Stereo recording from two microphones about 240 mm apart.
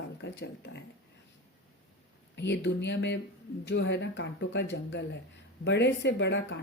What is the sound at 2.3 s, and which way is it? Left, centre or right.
Speech, left.